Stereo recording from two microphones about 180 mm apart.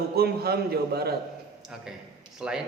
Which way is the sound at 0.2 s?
60° right (ahead or behind).